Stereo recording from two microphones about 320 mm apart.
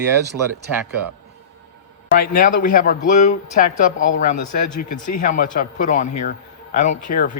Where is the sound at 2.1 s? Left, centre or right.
Left.